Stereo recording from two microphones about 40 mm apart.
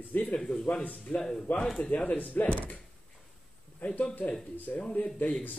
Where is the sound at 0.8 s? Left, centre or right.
Left.